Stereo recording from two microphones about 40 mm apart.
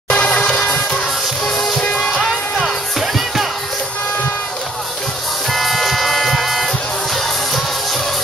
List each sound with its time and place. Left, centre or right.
0.1 s music: left
1.4 s music: centre
2.6 s music: centre
5.5 s music: centre